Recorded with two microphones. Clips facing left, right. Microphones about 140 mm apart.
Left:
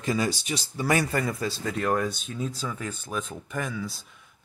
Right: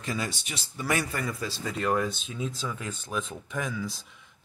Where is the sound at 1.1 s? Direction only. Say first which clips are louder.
Left 5 dB; 45° left (ahead or behind).